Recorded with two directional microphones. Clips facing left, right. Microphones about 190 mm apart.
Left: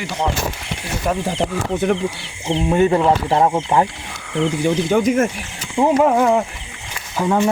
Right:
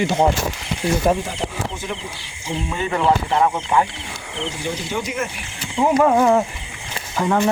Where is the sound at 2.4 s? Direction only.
45° left (ahead or behind).